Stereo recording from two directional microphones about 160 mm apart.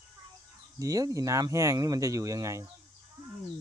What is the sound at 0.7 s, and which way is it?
Speech, 20° right (ahead or behind).